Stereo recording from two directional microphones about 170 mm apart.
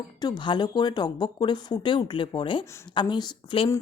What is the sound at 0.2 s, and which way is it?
Speech, 25° left (ahead or behind).